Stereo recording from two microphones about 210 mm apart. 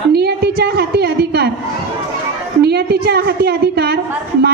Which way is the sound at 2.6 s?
50° right (ahead or behind).